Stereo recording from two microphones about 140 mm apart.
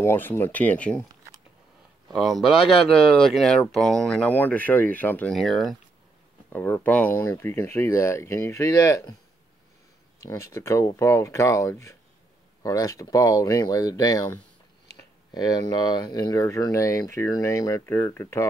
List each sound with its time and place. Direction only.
0.0 s speech: 15° left (ahead or behind)
2.0 s speech: centre (ahead or behind)
5.3 s speech: centre (ahead or behind)
6.5 s speech: 15° left (ahead or behind)
10.2 s speech: 25° left (ahead or behind)